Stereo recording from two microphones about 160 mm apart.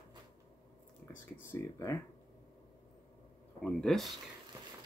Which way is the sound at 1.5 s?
20° left (ahead or behind).